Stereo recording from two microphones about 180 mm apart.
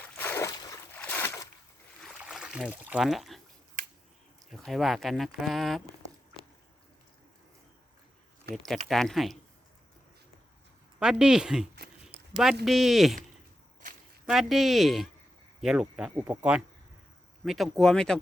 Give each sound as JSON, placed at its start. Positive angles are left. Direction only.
{"t": 0.2, "sound": "a sound", "side_deg": 15}
{"t": 0.9, "sound": "boat", "side_deg": 10}
{"t": 2.0, "sound": "a sound", "side_deg": -5}
{"t": 4.5, "sound": "speech", "side_deg": 0}
{"t": 8.5, "sound": "speech", "side_deg": -60}
{"t": 8.9, "sound": "speech", "side_deg": 0}
{"t": 11.0, "sound": "speech", "side_deg": -5}
{"t": 14.3, "sound": "speech", "side_deg": 0}